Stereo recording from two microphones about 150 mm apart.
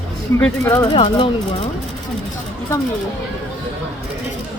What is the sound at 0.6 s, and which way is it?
Speech, 25° left (ahead or behind).